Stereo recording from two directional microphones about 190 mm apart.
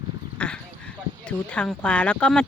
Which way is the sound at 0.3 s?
5° left (ahead or behind).